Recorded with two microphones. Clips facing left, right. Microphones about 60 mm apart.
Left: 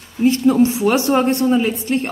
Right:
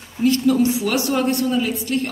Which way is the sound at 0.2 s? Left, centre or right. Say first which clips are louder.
Left 3 dB; left.